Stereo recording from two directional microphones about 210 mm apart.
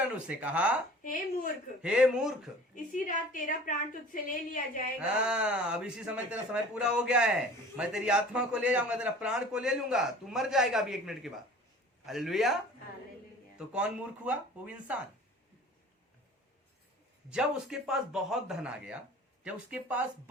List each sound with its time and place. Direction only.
0.1 s a man's voice: 5° right (ahead or behind)
1.8 s a man's voice: 5° right (ahead or behind)
2.7 s a woman's voice: 40° left (ahead or behind)
4.9 s a man's voice: 5° right (ahead or behind)
13.6 s a man's voice: 5° right (ahead or behind)
17.2 s a man's voice: 5° right (ahead or behind)